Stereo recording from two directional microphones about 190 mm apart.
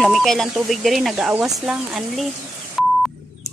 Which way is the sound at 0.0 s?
Centre (ahead or behind).